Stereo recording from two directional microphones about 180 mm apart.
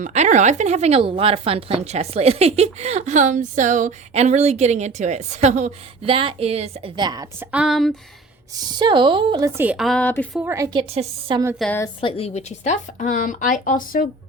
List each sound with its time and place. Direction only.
0.0 s a woman's voice: 40° right (ahead or behind); by 7.4 s 20° right (ahead or behind)
7.5 s a woman's voice: 5° right (ahead or behind)
8.5 s a woman's voice: 25° right (ahead or behind)
9.6 s a woman's voice: 5° right (ahead or behind)
10.4 s a woman's voice: 15° right (ahead or behind)
10.7 s a woman's voice: 30° right (ahead or behind)
11.9 s a woman's voice: 30° left (ahead or behind); by 14.1 s 50° left (ahead or behind)